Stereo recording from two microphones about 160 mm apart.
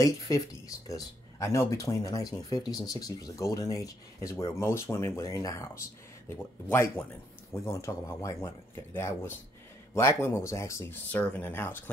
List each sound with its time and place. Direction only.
0.0 s speech: 20° left (ahead or behind)